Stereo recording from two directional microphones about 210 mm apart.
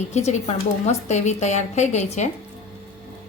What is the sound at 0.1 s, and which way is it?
A woman's voice, 30° left (ahead or behind).